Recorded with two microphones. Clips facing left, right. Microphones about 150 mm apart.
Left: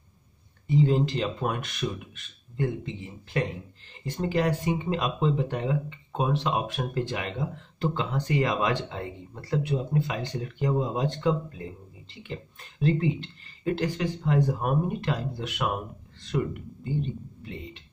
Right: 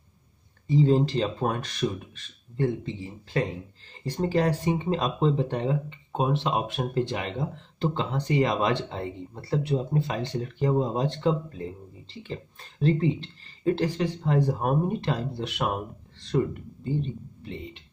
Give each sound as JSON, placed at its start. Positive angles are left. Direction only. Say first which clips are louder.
{"t": 0.7, "sound": "speech", "louder": "right 2 dB", "side_deg": -30}